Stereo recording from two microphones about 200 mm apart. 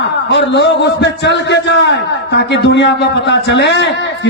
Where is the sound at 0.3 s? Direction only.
60° left (ahead or behind).